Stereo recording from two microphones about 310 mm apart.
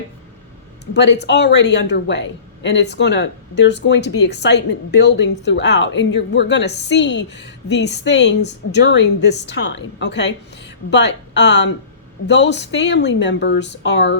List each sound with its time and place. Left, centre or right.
0.9 s speech: left